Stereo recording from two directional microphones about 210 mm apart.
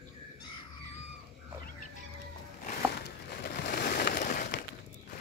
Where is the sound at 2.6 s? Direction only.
45° left (ahead or behind).